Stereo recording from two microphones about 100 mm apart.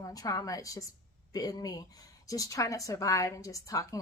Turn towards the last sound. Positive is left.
turn(degrees=35)  # may be behind; listen again after turning